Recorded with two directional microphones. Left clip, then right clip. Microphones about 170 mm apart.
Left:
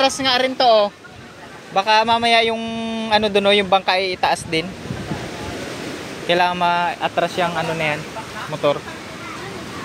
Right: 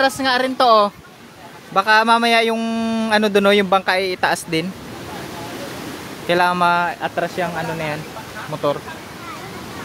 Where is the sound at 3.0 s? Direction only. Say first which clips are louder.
Even; 35° right (ahead or behind).